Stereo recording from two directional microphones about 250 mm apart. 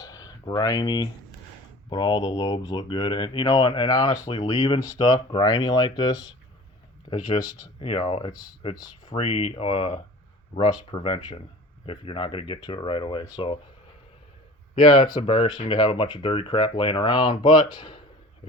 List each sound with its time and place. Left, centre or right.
0.0 s a sound: centre
1.9 s speech: centre
14.8 s speech: centre